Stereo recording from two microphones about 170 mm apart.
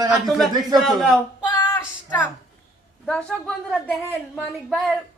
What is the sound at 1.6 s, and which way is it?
Child singing, 10° left (ahead or behind).